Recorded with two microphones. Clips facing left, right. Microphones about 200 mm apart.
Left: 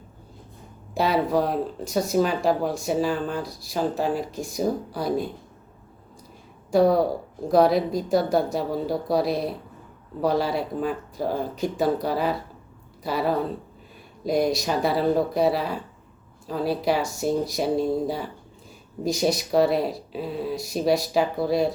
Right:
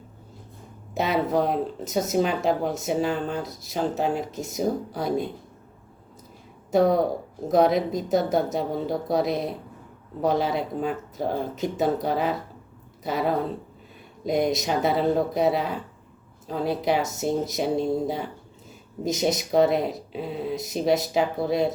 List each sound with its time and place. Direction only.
0.9 s speech: 20° right (ahead or behind)
6.7 s speech: 20° right (ahead or behind)